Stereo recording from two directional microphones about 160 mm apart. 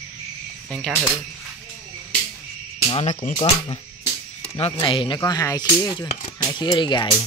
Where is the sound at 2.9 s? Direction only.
30° left (ahead or behind).